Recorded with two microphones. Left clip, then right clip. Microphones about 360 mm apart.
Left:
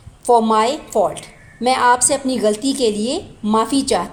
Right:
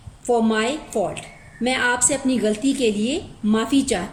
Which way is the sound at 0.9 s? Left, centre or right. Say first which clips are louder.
Left 7 dB; left.